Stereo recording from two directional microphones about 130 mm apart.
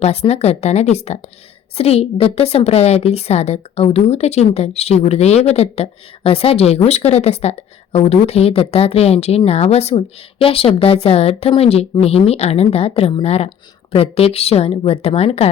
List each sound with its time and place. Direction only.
0.0 s a woman's voice: 55° left (ahead or behind)